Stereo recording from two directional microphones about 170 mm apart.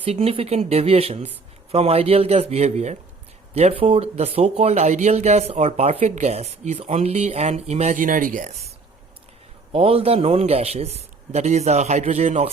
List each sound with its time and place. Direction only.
0.0 s speech: 35° right (ahead or behind)
9.7 s speech: 35° right (ahead or behind)